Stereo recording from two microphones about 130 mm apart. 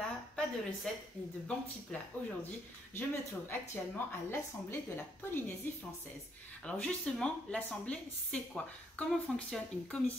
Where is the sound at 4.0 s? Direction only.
15° left (ahead or behind).